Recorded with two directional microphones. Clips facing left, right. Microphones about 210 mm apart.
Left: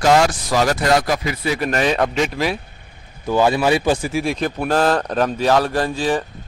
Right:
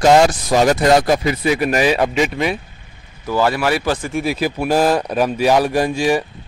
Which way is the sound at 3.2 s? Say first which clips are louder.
Left 1 dB; 20° left (ahead or behind).